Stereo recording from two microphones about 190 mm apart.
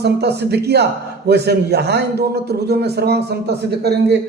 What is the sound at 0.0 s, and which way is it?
A man's voice, 60° right (ahead or behind).